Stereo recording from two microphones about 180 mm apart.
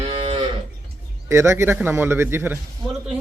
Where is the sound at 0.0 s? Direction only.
30° right (ahead or behind).